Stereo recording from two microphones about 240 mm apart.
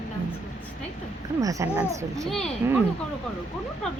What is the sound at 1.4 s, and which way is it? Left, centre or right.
Speech, centre.